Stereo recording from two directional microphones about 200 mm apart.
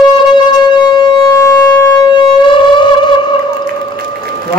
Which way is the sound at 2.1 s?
25° left (ahead or behind).